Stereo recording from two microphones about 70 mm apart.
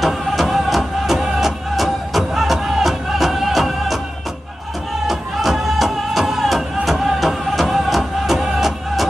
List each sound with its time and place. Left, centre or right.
0.0 s music: centre
5.0 s music: centre